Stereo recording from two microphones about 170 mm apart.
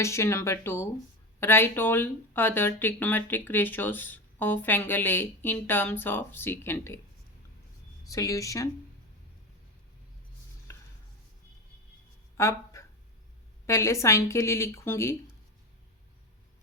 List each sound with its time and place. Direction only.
0.0 s speech: 15° left (ahead or behind)
8.0 s speech: 20° left (ahead or behind)
12.4 s speech: 15° left (ahead or behind)